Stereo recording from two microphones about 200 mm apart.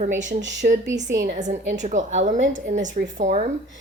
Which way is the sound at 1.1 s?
40° right (ahead or behind).